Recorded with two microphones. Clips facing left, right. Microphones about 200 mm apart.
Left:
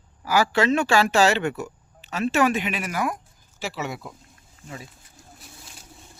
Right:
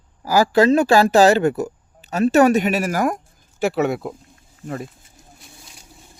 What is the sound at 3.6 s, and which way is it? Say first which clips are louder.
Speech: right 11 dB; 55° right (ahead or behind).